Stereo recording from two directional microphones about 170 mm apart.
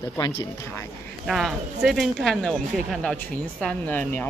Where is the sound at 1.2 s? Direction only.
Centre (ahead or behind).